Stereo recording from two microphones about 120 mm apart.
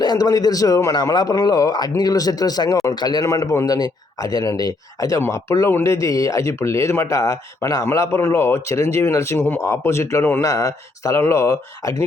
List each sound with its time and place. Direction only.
0.0 s a man's voice: 30° left (ahead or behind)